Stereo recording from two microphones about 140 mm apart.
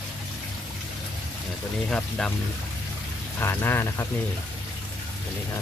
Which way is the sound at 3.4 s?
15° left (ahead or behind).